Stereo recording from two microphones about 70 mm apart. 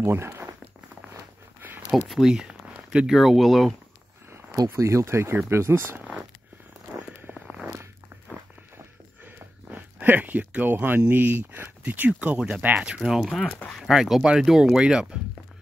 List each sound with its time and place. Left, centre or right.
0.0 s speech: right
2.0 s speech: centre
4.6 s speech: right
9.2 s a sound: right
11.1 s speech: right; by 13.3 s centre
13.3 s speech: centre
13.7 s speech: centre